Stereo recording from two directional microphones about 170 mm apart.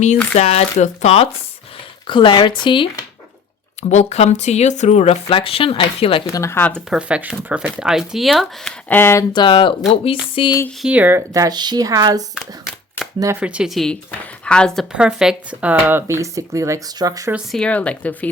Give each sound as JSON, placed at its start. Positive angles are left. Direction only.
{"t": 0.3, "sound": "speech", "side_deg": 40}
{"t": 3.8, "sound": "speech", "side_deg": 40}
{"t": 6.2, "sound": "speech", "side_deg": 15}
{"t": 6.9, "sound": "speech", "side_deg": -10}
{"t": 8.9, "sound": "speech", "side_deg": 15}
{"t": 9.3, "sound": "speech", "side_deg": 30}
{"t": 10.8, "sound": "speech", "side_deg": -10}
{"t": 13.4, "sound": "speech", "side_deg": -5}
{"t": 17.3, "sound": "speech", "side_deg": 5}